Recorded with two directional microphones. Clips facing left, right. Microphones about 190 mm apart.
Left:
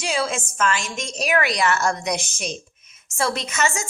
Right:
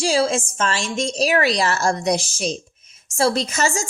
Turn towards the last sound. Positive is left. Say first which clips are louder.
# right 3 dB
turn(degrees=-30)  # may be behind; listen again after turning